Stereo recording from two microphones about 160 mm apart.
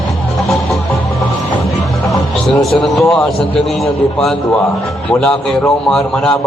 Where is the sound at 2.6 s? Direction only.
Centre (ahead or behind).